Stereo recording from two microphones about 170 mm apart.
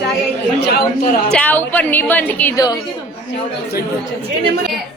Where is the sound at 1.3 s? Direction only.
10° left (ahead or behind).